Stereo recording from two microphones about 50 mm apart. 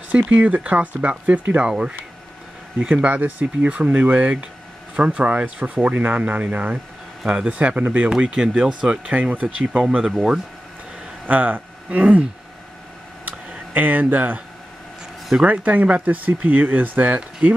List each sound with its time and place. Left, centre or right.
0.1 s speech: right
1.6 s speech: centre; by 3.4 s right
3.6 s speech: right
8.1 s speech: centre
9.1 s speech: right; by 10.4 s centre
11.2 s speech: right
13.7 s speech: right
15.4 s speech: right